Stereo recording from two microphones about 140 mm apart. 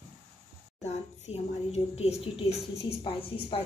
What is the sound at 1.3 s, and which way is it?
A woman's voice, 45° left (ahead or behind).